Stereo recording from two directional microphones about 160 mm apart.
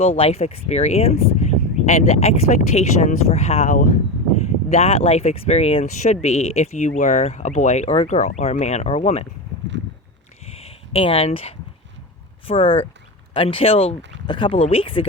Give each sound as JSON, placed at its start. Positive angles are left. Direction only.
{"t": 0.0, "sound": "speech", "side_deg": 40}
{"t": 4.7, "sound": "speech", "side_deg": 40}
{"t": 10.5, "sound": "a sound", "side_deg": 40}
{"t": 12.5, "sound": "speech", "side_deg": 35}